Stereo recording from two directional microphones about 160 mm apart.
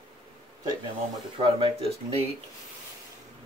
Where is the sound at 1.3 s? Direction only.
35° right (ahead or behind).